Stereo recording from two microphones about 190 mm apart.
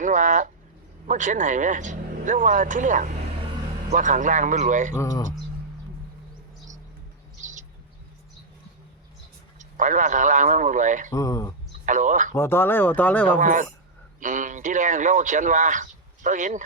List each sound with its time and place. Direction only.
0.0 s speech: 40° right (ahead or behind)
4.9 s speech: 20° left (ahead or behind)
9.6 s speech: 40° right (ahead or behind)
11.1 s speech: 15° left (ahead or behind)
11.9 s speech: 40° right (ahead or behind)
12.3 s speech: 15° left (ahead or behind)
13.4 s a man's voice: 45° right (ahead or behind)